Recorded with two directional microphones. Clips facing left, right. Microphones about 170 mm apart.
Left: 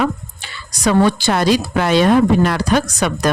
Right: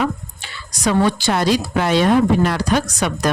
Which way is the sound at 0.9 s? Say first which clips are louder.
Left 3 dB; 80° left.